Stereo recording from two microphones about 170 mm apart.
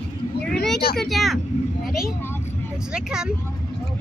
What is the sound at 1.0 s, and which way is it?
Speech, centre (ahead or behind).